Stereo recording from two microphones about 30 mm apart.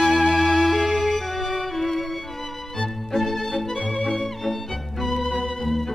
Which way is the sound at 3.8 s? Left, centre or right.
Left.